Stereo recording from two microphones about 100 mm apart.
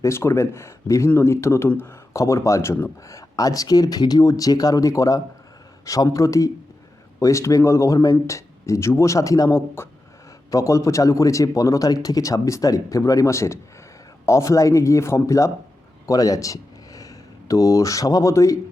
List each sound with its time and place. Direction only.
0.0 s speech: 25° left (ahead or behind)